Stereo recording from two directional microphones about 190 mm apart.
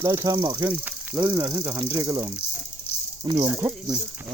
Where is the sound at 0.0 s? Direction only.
15° right (ahead or behind).